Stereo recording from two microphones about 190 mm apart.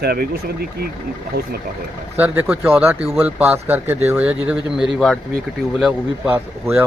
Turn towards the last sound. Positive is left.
turn(degrees=-10)  # may be behind; listen again after turning